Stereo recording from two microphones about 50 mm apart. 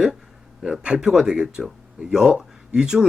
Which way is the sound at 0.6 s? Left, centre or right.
Centre.